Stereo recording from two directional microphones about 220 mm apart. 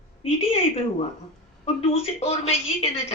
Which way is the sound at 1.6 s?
25° left (ahead or behind).